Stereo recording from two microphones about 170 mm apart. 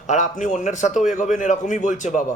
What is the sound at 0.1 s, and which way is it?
A man's voice, 45° left (ahead or behind).